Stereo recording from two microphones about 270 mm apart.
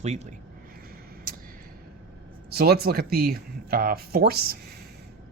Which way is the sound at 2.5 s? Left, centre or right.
Right.